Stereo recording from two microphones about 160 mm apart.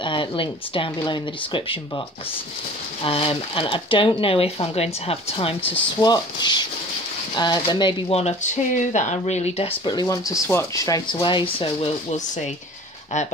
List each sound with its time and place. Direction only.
0.0 s speech: 30° left (ahead or behind)
5.7 s speech: 25° left (ahead or behind)
8.1 s speech: 40° left (ahead or behind)
9.8 s speech: 25° left (ahead or behind); by 12.4 s 40° left (ahead or behind)